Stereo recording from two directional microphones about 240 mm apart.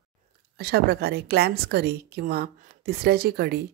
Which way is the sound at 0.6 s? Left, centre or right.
Right.